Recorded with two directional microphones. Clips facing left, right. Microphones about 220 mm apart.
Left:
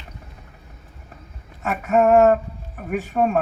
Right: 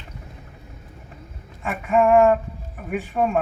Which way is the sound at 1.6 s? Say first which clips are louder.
Left 1 dB; 45° left (ahead or behind).